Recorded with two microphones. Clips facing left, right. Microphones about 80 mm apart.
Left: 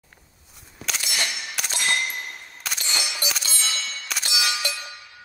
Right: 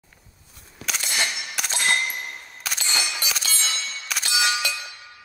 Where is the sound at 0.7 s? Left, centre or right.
Centre.